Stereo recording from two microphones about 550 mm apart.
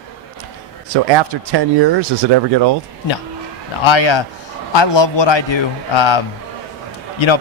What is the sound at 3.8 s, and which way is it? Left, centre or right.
A man's voice, left.